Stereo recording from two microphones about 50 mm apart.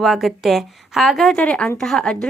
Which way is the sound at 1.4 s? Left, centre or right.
Left.